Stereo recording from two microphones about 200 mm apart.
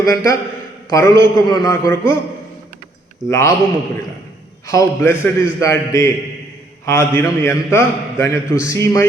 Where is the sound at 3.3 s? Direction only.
15° left (ahead or behind).